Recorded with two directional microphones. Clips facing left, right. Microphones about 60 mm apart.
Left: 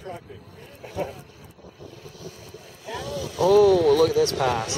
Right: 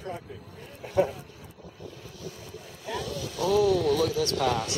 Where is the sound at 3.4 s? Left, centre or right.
Left.